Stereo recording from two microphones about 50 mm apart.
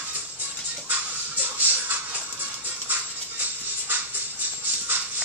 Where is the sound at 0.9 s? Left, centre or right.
Right.